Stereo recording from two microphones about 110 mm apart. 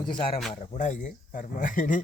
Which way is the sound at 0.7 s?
90° left.